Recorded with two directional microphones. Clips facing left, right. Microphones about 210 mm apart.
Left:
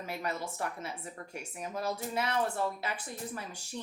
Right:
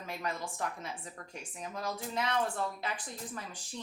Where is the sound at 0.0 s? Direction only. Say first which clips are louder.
Left 2 dB; 5° left (ahead or behind).